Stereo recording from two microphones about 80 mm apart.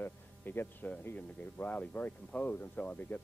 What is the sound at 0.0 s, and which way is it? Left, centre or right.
Speech, left.